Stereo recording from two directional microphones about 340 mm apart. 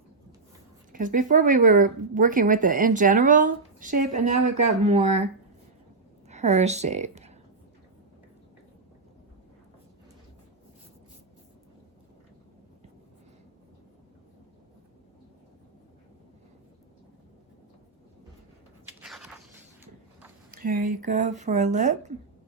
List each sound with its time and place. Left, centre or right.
0.9 s speech: right
6.2 s a woman's voice: centre
18.9 s biting: centre
20.5 s speech: right